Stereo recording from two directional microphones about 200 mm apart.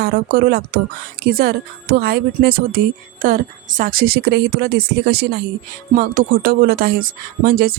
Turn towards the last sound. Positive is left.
turn(degrees=-50)  # may be behind; listen again after turning